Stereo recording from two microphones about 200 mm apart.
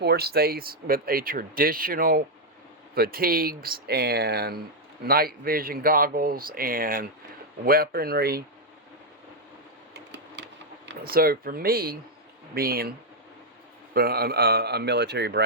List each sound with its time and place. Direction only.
0.0 s speech: 55° right (ahead or behind)
9.9 s a sound: 60° right (ahead or behind)
12.5 s speech: 50° right (ahead or behind)
13.9 s speech: 50° right (ahead or behind)